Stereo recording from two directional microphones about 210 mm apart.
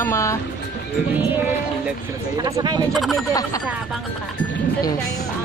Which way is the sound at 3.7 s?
Centre (ahead or behind).